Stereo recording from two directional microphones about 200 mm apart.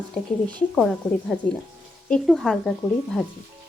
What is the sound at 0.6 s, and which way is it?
A woman's voice, centre (ahead or behind).